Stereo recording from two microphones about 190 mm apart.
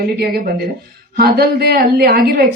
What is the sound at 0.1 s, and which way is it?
A woman's voice, 55° right (ahead or behind).